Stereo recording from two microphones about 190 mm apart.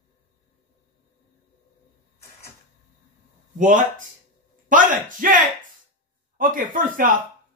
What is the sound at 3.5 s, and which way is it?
Speech, 40° right (ahead or behind).